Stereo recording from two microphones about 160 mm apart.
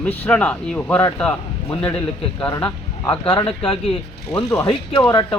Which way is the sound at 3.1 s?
30° left (ahead or behind).